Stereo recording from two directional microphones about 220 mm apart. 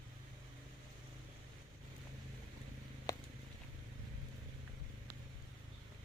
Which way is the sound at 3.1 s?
15° left (ahead or behind).